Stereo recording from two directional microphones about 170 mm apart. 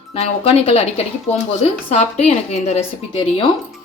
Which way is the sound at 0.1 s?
35° left (ahead or behind).